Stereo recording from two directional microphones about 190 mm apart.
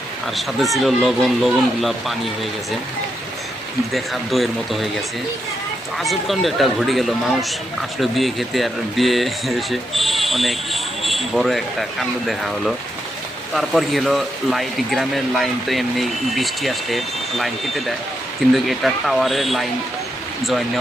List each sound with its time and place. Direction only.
0.3 s speech: centre (ahead or behind)
3.9 s speech: centre (ahead or behind)
6.0 s speech: centre (ahead or behind)